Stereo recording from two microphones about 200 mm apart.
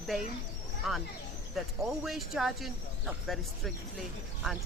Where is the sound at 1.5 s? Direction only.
Centre (ahead or behind).